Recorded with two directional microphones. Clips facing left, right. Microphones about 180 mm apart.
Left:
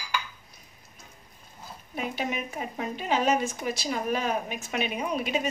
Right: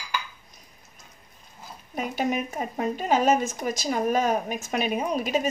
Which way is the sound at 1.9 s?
45° right (ahead or behind).